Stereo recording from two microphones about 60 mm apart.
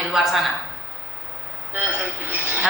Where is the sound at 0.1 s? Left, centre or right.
Centre.